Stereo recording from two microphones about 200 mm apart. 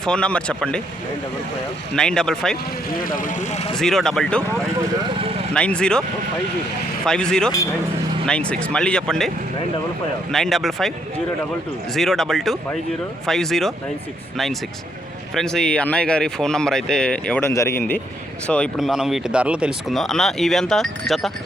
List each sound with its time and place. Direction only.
0.0 s speech: 5° left (ahead or behind)
2.0 s speech: 5° left (ahead or behind)
2.9 s speech: 45° left (ahead or behind)
3.8 s speech: centre (ahead or behind)
5.5 s speech: 5° left (ahead or behind)
7.0 s speech: 5° left (ahead or behind)
10.3 s speech: centre (ahead or behind)
11.9 s speech: centre (ahead or behind)
15.4 s speech: 5° left (ahead or behind)